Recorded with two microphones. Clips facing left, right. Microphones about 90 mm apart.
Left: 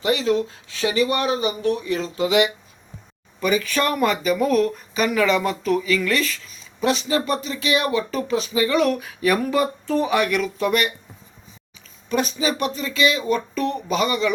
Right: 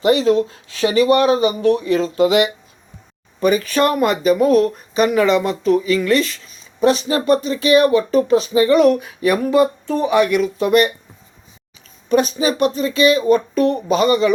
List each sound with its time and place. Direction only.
0.0 s speech: 50° right (ahead or behind); by 6.5 s 35° right (ahead or behind)
6.8 s speech: 50° right (ahead or behind)
12.0 s speech: 50° right (ahead or behind)
13.8 s speech: 55° right (ahead or behind)